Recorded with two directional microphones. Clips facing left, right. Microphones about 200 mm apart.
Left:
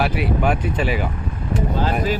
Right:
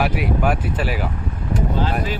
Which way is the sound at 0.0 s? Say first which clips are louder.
Even; 5° right (ahead or behind).